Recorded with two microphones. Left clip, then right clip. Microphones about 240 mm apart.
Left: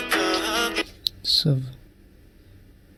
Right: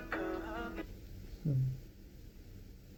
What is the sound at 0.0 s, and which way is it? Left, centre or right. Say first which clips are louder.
Music: left 17 dB; left.